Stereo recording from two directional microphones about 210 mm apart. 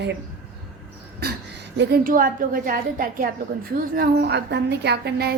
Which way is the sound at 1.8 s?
45° right (ahead or behind).